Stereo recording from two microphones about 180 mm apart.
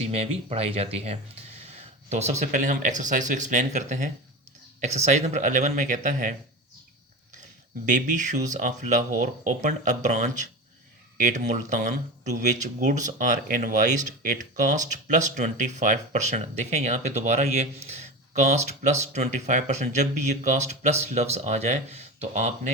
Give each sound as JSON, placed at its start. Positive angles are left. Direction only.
{"t": 0.0, "sound": "speech", "side_deg": -35}
{"t": 7.9, "sound": "speech", "side_deg": -45}